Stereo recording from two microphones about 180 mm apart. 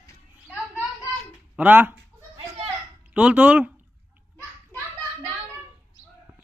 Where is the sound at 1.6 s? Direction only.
10° right (ahead or behind).